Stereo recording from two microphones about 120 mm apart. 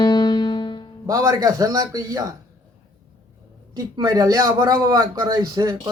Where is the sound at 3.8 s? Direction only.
30° right (ahead or behind).